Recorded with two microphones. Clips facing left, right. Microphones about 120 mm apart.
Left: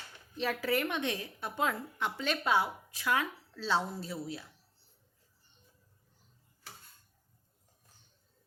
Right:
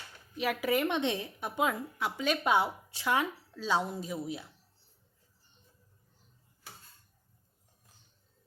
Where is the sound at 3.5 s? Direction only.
15° right (ahead or behind).